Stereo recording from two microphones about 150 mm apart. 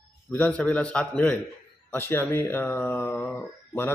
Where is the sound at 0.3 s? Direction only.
15° left (ahead or behind).